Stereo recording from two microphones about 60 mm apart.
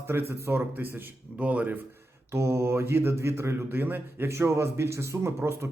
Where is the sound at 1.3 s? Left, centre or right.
Right.